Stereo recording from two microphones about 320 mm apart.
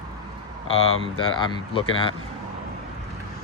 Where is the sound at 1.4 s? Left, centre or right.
Centre.